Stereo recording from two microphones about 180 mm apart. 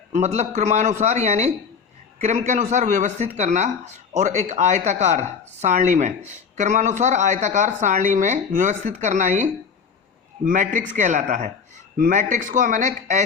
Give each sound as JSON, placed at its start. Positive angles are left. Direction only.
{"t": 0.1, "sound": "a man's voice", "side_deg": -40}